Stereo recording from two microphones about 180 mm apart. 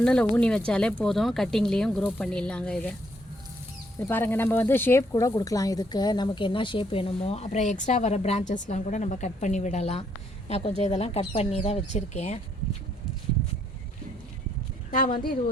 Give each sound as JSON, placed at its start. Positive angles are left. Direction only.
{"t": 0.0, "sound": "speech", "side_deg": 5}
{"t": 3.9, "sound": "speech", "side_deg": 10}
{"t": 14.8, "sound": "a woman's voice", "side_deg": 50}